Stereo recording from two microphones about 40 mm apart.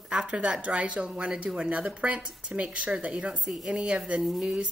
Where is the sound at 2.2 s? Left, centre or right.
Centre.